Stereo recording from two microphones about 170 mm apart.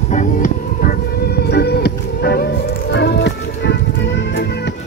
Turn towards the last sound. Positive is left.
turn(degrees=80)